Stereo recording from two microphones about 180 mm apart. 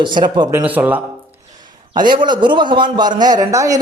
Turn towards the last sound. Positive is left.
turn(degrees=-20)  # may be behind; listen again after turning